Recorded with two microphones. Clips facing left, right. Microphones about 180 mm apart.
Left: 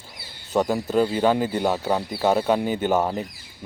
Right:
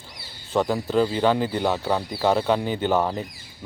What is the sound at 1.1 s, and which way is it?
Speech, 20° left (ahead or behind).